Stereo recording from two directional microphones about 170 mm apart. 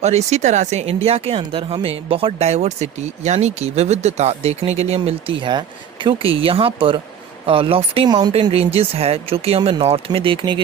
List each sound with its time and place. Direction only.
0.0 s speech: 40° right (ahead or behind)